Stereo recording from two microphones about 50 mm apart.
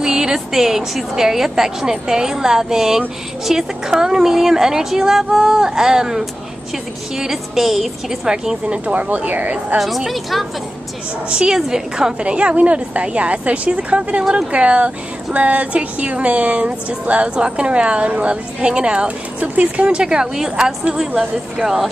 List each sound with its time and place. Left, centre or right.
0.0 s speech: centre
8.8 s speech: right
9.8 s a woman's voice: centre
11.2 s speech: centre